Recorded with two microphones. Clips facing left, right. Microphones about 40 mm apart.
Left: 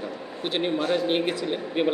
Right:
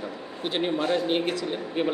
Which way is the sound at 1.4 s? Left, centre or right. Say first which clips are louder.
Left 2 dB; left.